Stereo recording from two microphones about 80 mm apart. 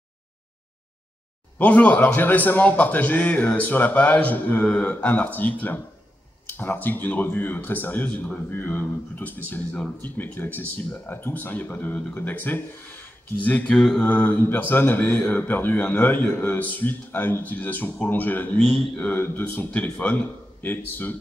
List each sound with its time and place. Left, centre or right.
1.6 s speech: centre
13.7 s mantra: centre
14.0 s speech: left
18.6 s a man's voice: centre
18.9 s speech: left